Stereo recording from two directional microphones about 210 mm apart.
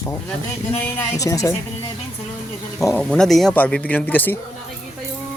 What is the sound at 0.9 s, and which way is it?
Speech, 15° left (ahead or behind).